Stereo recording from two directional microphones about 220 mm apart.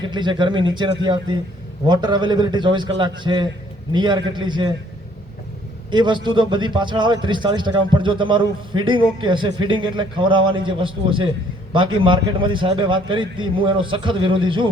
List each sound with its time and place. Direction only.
0.0 s a man's voice: 20° right (ahead or behind)
5.9 s a man's voice: 20° right (ahead or behind)